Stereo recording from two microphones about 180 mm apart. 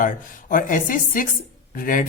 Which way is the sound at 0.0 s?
50° left (ahead or behind).